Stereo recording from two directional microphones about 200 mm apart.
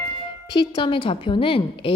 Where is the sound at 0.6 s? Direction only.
25° left (ahead or behind).